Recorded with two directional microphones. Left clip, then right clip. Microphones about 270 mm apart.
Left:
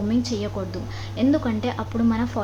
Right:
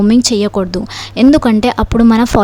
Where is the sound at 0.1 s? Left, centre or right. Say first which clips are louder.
Right 14 dB; right.